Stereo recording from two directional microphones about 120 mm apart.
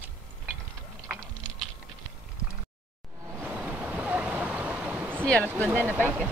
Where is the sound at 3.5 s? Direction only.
10° right (ahead or behind).